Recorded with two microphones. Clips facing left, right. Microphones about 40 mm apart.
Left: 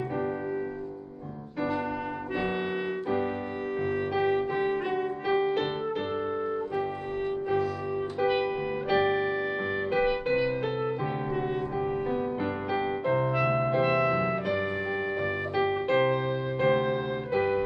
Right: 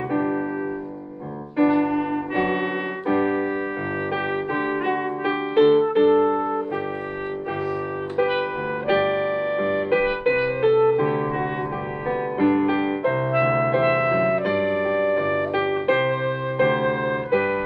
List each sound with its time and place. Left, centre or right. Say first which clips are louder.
1.6 s music: right 11 dB; right
8.2 s music: right 5 dB; right
9.8 s music: right 3 dB; right
12.4 s music: right 10 dB; right